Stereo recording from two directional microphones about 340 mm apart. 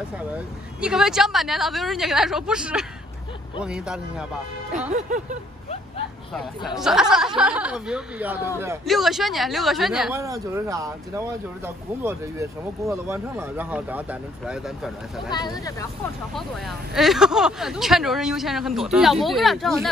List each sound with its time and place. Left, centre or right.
0.3 s speech: centre
4.9 s speech: right
6.3 s speech: centre
15.3 s speech: centre